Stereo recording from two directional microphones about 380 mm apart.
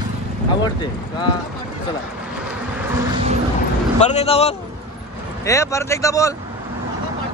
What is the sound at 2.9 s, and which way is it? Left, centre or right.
Vehicle, centre.